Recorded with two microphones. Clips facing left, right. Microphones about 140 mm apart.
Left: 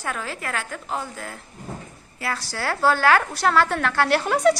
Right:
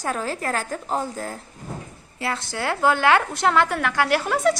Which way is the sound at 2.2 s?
25° right (ahead or behind).